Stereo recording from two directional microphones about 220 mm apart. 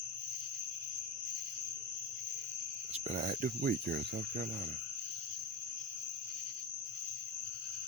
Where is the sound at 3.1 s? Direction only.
40° right (ahead or behind).